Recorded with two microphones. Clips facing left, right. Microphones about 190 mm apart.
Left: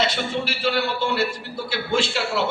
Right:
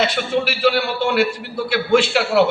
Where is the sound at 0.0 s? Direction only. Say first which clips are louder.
Right 5 dB; 60° right (ahead or behind).